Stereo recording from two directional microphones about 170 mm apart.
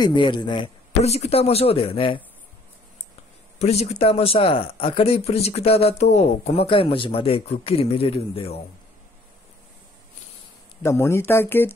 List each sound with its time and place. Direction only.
0.0 s a man's voice: 30° left (ahead or behind)
1.0 s a man's voice: 40° left (ahead or behind)
3.5 s a man's voice: 40° left (ahead or behind)
10.8 s speech: 15° left (ahead or behind)